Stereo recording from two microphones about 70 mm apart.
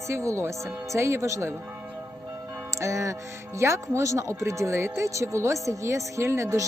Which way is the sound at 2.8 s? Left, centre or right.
Right.